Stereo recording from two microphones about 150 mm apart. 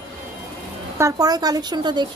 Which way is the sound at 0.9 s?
20° right (ahead or behind).